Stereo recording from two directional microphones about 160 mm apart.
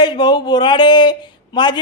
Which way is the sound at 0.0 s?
25° left (ahead or behind).